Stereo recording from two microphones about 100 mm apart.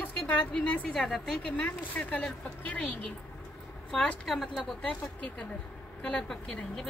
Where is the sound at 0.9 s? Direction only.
5° left (ahead or behind).